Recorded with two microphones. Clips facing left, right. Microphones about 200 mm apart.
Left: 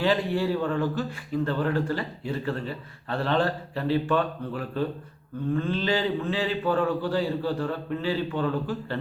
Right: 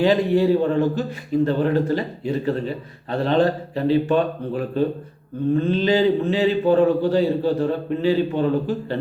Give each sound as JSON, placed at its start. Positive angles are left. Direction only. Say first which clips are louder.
{"t": 0.0, "sound": "speech", "louder": "right 7 dB", "side_deg": -20}